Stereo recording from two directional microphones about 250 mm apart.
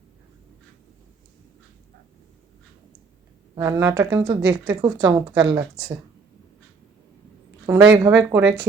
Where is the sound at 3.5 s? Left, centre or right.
Centre.